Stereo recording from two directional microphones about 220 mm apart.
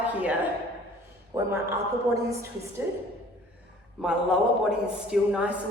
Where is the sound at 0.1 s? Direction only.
5° right (ahead or behind).